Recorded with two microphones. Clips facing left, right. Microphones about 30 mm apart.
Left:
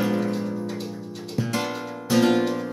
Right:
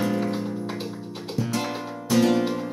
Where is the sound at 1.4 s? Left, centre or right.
Centre.